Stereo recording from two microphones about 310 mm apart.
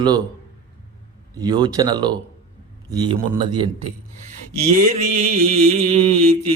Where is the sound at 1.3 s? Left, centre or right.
Centre.